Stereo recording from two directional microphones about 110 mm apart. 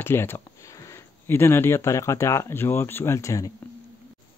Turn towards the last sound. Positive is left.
turn(degrees=30)  # may be behind; listen again after turning